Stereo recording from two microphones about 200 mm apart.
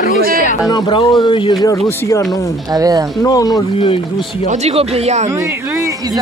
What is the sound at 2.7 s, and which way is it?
Speech, 20° right (ahead or behind).